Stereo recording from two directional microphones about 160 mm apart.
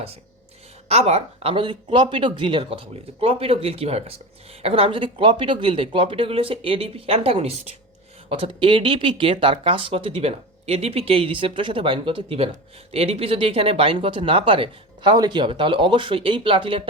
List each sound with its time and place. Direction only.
0.9 s speech: 40° right (ahead or behind)